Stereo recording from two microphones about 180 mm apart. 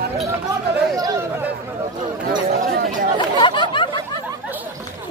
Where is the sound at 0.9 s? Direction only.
20° right (ahead or behind).